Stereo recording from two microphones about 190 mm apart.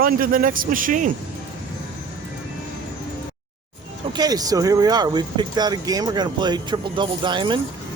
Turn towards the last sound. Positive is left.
turn(degrees=-25)  # may be behind; listen again after turning